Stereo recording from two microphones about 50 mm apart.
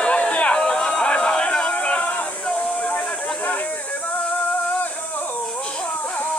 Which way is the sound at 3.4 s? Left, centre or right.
Left.